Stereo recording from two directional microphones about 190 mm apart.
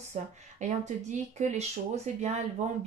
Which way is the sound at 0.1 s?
40° right (ahead or behind).